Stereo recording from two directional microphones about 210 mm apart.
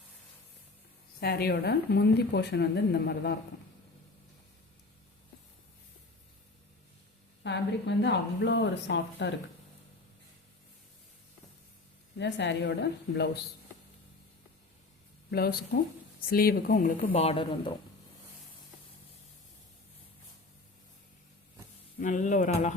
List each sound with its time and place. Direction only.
1.2 s a woman's voice: 50° left (ahead or behind)
7.4 s a woman's voice: 55° left (ahead or behind)
12.1 s a woman's voice: 55° left (ahead or behind)
15.3 s a woman's voice: 50° left (ahead or behind)
17.1 s speech: 25° left (ahead or behind)
21.9 s speech: 35° left (ahead or behind)